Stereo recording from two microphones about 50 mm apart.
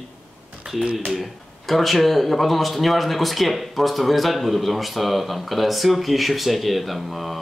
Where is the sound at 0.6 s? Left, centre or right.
Centre.